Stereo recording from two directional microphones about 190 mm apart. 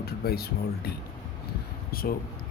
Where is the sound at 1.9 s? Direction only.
50° left (ahead or behind).